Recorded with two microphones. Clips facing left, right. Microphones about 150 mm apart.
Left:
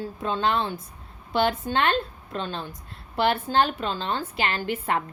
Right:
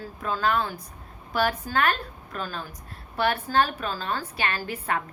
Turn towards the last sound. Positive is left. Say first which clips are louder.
# left 3 dB
turn(degrees=25)  # may be behind; listen again after turning